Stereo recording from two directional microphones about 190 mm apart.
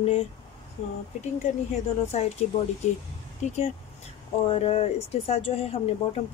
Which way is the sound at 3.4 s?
40° left (ahead or behind).